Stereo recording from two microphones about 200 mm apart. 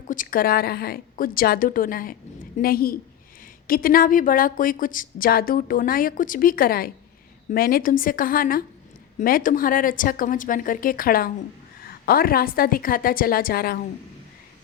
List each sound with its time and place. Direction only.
0.1 s a woman's voice: 45° left (ahead or behind)